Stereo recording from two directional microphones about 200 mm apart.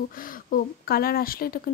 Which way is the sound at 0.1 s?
45° left (ahead or behind).